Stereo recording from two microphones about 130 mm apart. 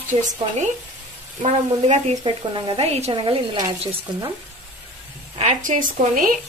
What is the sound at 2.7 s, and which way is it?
Speech, 50° right (ahead or behind).